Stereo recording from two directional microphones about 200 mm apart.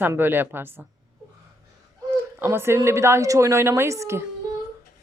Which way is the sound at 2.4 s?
10° right (ahead or behind).